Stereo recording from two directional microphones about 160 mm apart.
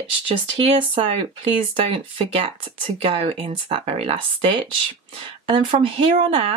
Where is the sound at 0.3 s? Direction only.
35° right (ahead or behind).